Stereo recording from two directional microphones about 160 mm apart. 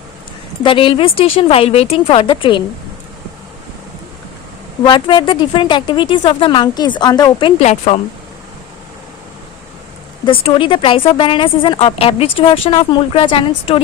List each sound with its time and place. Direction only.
0.6 s a woman's voice: 30° left (ahead or behind)
4.9 s a woman's voice: 30° left (ahead or behind)
10.2 s a woman's voice: 35° left (ahead or behind)